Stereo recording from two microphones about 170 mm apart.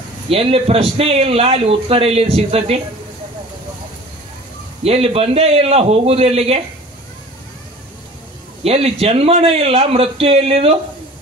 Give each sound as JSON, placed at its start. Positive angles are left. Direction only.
{"t": 0.3, "sound": "a man's voice", "side_deg": -35}
{"t": 4.8, "sound": "a man's voice", "side_deg": -35}
{"t": 8.6, "sound": "a man's voice", "side_deg": -35}